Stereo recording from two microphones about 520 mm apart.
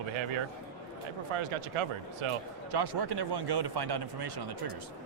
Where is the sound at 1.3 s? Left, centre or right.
Right.